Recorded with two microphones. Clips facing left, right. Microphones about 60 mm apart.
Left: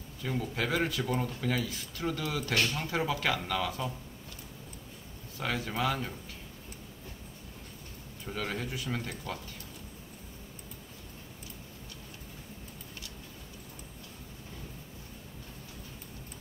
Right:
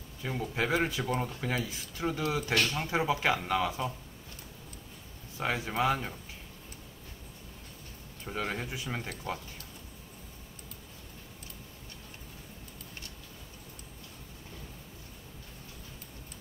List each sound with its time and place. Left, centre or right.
0.2 s speech: centre
5.4 s speech: centre
8.3 s speech: centre